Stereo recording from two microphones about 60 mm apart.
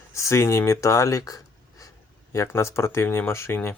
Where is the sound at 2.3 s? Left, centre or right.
Left.